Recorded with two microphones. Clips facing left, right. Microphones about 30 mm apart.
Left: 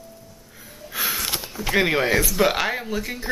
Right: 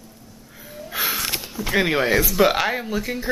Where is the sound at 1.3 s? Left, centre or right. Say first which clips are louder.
Left 1 dB; centre.